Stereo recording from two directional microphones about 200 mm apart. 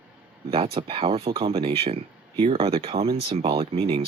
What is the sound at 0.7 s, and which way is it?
Speech, 25° right (ahead or behind).